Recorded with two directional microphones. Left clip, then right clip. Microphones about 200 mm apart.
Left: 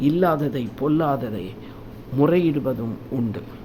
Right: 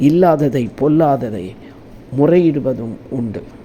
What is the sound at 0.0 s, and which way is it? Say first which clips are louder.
A man's voice: right 8 dB; 25° right (ahead or behind).